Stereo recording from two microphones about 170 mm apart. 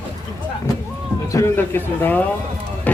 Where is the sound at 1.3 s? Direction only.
15° left (ahead or behind).